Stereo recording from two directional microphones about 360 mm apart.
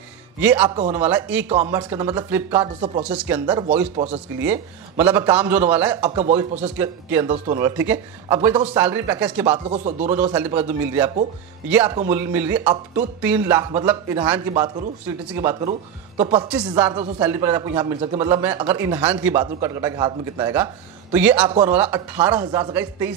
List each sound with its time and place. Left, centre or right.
0.4 s speech: centre
3.9 s speech: centre
4.4 s speech: centre
9.8 s speech: centre
10.1 s a man's voice: centre
16.4 s a man's voice: centre